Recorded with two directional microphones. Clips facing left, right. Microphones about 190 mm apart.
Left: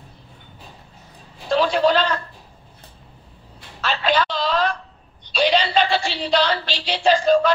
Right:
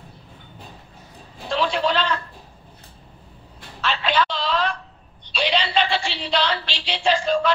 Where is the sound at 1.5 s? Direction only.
40° left (ahead or behind).